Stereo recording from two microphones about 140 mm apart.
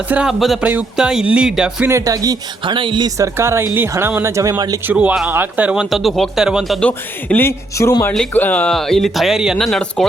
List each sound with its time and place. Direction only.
0.1 s speech: 5° right (ahead or behind)
0.7 s music: 5° right (ahead or behind)
1.9 s speech: 25° right (ahead or behind)
3.2 s speech: 20° right (ahead or behind)
4.9 s speech: 10° right (ahead or behind)
6.8 s speech: 10° left (ahead or behind)